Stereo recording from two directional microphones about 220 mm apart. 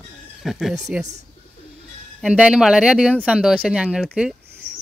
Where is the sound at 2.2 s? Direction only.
5° right (ahead or behind).